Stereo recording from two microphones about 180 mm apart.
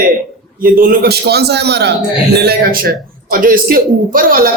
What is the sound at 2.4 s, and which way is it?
A woman's voice, 55° right (ahead or behind).